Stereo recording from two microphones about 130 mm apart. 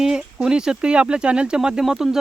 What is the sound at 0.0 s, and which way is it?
Speech, 5° right (ahead or behind).